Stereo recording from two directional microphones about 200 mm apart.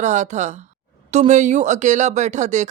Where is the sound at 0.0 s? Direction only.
35° right (ahead or behind).